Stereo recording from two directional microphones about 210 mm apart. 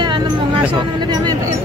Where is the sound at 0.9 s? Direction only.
20° right (ahead or behind).